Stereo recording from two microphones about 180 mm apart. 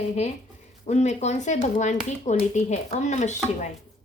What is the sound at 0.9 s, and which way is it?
Speech, 40° left (ahead or behind).